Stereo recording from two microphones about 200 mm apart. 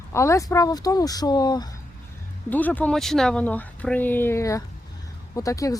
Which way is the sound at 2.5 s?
10° left (ahead or behind).